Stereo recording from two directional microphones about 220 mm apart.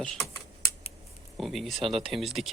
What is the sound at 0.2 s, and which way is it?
Computer keyboard, 15° left (ahead or behind).